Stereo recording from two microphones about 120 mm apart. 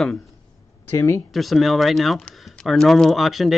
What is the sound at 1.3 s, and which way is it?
Speech, centre (ahead or behind).